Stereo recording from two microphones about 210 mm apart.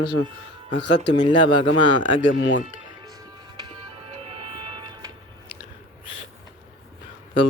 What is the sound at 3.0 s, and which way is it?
Music, 20° right (ahead or behind).